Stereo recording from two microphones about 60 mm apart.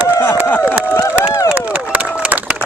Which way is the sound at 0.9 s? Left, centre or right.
Left.